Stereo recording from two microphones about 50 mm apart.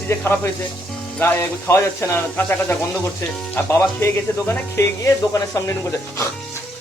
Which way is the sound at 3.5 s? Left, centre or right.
Left.